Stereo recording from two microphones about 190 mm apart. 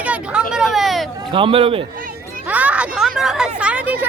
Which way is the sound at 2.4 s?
10° right (ahead or behind).